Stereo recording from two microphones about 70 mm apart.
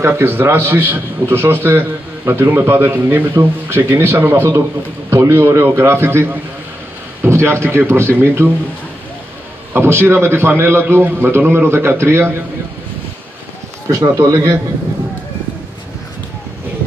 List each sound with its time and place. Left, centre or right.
0.0 s a man's voice: right
9.8 s a man's voice: right
14.1 s a man's voice: right